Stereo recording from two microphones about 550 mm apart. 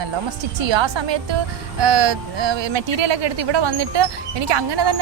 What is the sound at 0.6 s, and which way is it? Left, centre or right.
Speech, right.